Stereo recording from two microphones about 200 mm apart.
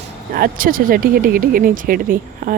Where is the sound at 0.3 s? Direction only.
45° right (ahead or behind).